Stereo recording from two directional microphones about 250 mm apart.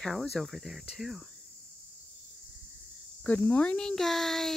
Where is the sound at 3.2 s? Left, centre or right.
Centre.